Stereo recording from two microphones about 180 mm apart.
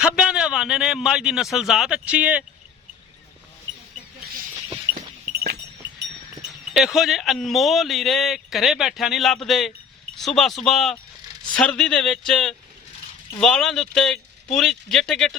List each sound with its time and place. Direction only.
0.0 s a man's voice: 5° right (ahead or behind)
4.9 s livestock: 60° right (ahead or behind)
6.7 s a man's voice: centre (ahead or behind)